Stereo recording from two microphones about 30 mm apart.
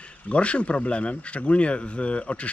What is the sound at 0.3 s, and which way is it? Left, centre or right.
Speech, left.